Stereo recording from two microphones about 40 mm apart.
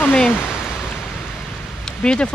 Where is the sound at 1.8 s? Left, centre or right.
Left.